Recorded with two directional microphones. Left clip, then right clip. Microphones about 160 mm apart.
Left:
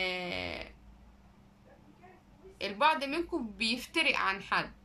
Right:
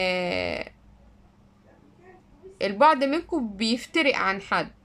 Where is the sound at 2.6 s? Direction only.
50° right (ahead or behind).